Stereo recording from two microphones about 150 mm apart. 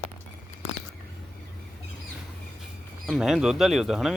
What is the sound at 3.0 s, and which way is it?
Speech, 5° right (ahead or behind).